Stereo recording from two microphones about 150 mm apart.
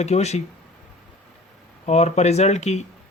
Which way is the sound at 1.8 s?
45° left (ahead or behind).